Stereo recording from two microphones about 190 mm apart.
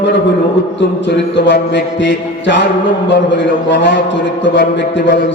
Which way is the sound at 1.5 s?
65° left (ahead or behind).